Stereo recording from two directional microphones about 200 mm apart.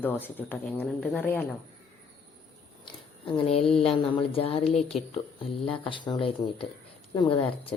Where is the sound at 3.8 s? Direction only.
25° left (ahead or behind).